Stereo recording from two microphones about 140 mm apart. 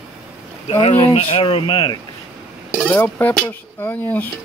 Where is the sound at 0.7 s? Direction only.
45° left (ahead or behind).